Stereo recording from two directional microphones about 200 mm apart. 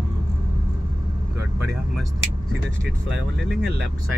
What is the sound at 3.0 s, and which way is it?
Speech, 55° right (ahead or behind).